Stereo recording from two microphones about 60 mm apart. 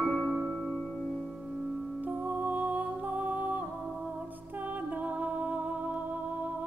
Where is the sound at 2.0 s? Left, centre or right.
Right.